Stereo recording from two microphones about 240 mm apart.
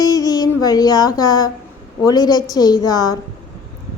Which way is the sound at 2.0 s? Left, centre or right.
Centre.